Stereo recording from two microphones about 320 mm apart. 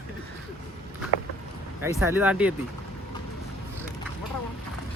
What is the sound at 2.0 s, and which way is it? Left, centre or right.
Speech, centre.